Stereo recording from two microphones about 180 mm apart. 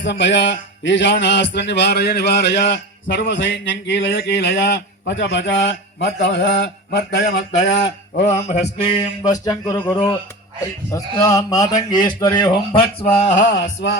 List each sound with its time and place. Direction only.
0.0 s a man's voice: 85° left
8.1 s mantra: 40° left (ahead or behind); by 9.8 s 20° left (ahead or behind)
10.9 s speech: 20° left (ahead or behind)
13.5 s a man's voice: 80° left